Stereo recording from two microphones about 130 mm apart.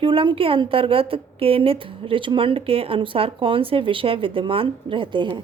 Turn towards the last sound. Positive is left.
turn(degrees=-40)  # may be behind; listen again after turning